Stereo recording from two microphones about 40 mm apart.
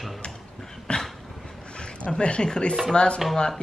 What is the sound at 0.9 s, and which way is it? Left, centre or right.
Dog, left.